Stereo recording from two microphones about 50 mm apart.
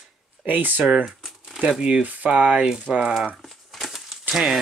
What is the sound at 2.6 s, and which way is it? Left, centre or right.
Speech, centre.